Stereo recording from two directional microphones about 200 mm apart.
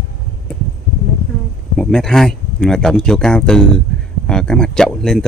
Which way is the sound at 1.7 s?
5° left (ahead or behind).